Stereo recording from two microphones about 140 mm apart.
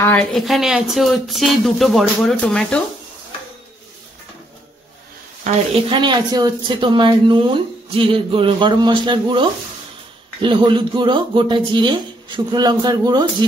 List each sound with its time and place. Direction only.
0.0 s a woman's voice: 15° left (ahead or behind)
0.3 s speech: centre (ahead or behind)
5.9 s a man's voice: 35° right (ahead or behind)